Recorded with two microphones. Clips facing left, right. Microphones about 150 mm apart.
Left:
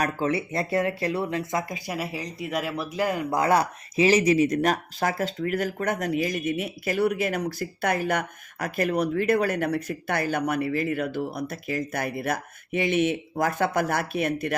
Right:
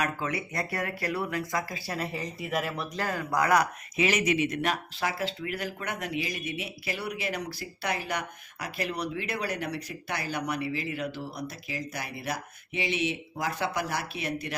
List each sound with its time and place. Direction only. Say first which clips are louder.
0.0 s speech: left 6 dB; 30° left (ahead or behind)
2.1 s speech: left 2 dB; centre (ahead or behind)
3.0 s speech: left 4 dB; 20° left (ahead or behind); by 14.5 s 55° left (ahead or behind)